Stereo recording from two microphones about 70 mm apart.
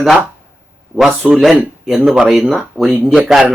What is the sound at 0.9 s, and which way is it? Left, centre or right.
Speech, centre.